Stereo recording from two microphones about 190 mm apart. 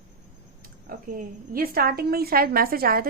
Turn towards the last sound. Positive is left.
turn(degrees=-50)  # may be behind; listen again after turning